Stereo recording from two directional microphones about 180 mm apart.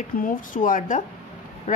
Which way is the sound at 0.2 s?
50° left (ahead or behind).